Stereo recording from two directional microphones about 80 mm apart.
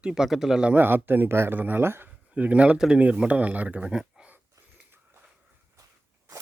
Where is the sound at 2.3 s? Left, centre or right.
Centre.